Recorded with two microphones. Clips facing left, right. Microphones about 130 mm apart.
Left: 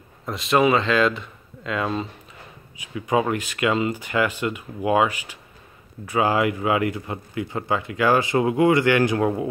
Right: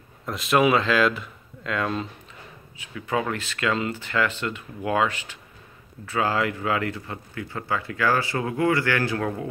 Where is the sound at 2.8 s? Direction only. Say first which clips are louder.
Left 5 dB; 15° left (ahead or behind).